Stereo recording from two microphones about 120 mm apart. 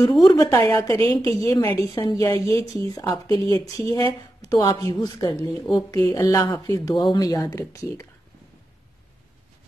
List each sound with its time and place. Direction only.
0.5 s a woman's voice: 25° left (ahead or behind)